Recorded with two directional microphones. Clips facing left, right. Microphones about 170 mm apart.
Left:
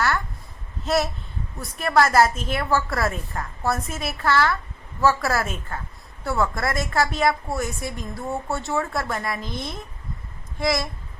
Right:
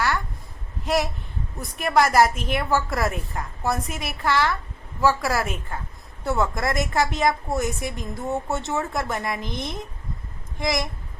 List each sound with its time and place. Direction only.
1.5 s a woman's voice: 15° right (ahead or behind)